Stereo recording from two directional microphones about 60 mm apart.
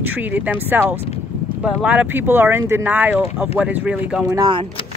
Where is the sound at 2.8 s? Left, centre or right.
Right.